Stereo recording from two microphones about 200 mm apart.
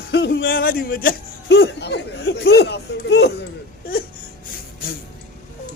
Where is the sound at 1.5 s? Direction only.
60° left (ahead or behind).